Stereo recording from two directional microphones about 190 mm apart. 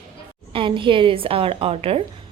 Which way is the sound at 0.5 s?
25° right (ahead or behind).